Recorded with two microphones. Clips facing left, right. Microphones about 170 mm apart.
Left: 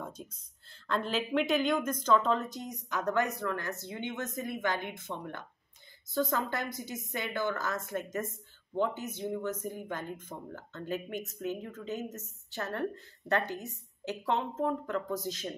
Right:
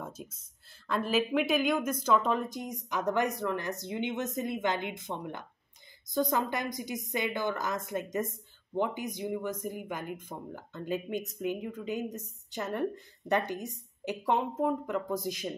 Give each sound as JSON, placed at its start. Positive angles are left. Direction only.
{"t": 0.2, "sound": "speech", "side_deg": -10}